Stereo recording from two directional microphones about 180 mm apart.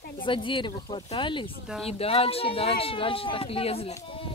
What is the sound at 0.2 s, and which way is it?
Speech, 25° left (ahead or behind).